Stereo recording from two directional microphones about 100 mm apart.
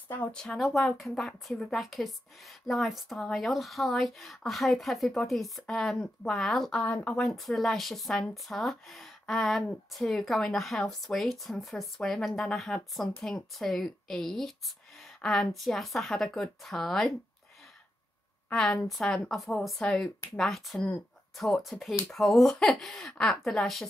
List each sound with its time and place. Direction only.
0.1 s speech: 15° left (ahead or behind)
0.4 s a woman's voice: 5° left (ahead or behind)
18.5 s a woman's voice: 5° left (ahead or behind)